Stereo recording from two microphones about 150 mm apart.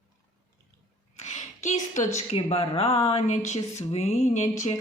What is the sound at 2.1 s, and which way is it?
Speech, 40° left (ahead or behind).